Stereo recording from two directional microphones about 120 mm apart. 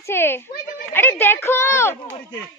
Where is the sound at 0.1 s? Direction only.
20° left (ahead or behind).